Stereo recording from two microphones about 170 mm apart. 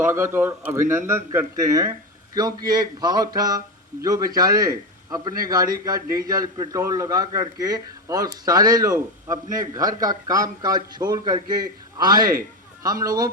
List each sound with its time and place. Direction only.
0.0 s a man's voice: 15° right (ahead or behind)